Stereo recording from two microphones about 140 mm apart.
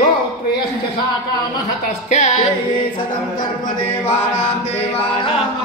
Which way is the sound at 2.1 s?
60° left (ahead or behind).